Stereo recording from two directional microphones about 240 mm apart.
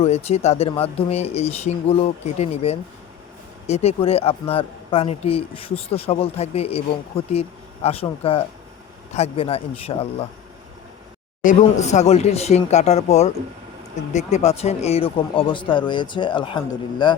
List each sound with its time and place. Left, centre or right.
0.0 s speech: left
11.4 s speech: left